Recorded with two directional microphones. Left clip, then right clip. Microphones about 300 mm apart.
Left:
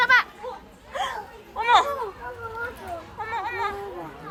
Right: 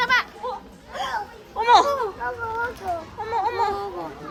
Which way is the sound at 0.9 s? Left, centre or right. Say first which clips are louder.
Left 1 dB; centre.